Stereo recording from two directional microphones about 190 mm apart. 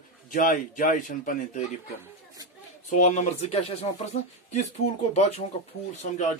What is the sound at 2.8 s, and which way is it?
Speech, 40° left (ahead or behind).